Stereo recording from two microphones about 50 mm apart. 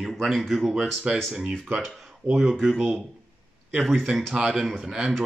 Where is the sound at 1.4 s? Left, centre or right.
Centre.